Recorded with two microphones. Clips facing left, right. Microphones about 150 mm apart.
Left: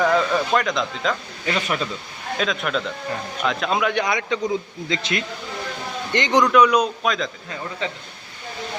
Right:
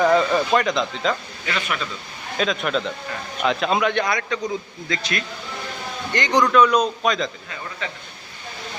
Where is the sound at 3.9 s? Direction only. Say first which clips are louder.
Left 1 dB; 15° left (ahead or behind).